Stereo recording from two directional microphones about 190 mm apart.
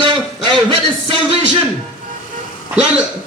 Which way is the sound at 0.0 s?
25° right (ahead or behind).